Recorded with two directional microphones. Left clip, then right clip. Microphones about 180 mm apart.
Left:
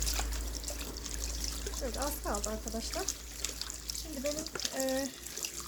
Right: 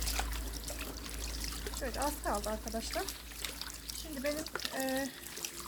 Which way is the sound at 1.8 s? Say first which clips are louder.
Right 1 dB; 10° left (ahead or behind).